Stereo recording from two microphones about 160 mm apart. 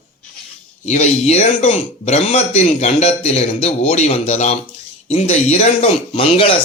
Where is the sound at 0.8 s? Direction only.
45° left (ahead or behind).